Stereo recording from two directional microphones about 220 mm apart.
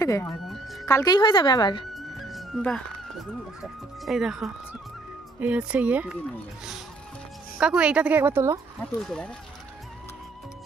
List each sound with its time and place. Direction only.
0.0 s speech: 15° left (ahead or behind)
0.5 s music: centre (ahead or behind)
0.8 s a woman's voice: 15° left (ahead or behind)
2.0 s music: centre (ahead or behind)
4.0 s a woman's voice: centre (ahead or behind)
7.5 s a woman's voice: 5° right (ahead or behind)
9.0 s speech: centre (ahead or behind)